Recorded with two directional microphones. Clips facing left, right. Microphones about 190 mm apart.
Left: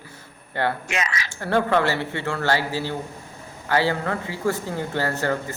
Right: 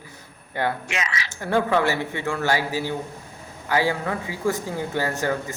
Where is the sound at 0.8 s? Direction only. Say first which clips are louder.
Left 2 dB; 45° left (ahead or behind).